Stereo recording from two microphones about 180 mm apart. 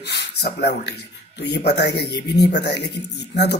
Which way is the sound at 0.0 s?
65° left (ahead or behind).